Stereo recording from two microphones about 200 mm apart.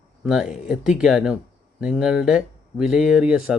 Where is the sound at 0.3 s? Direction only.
5° right (ahead or behind).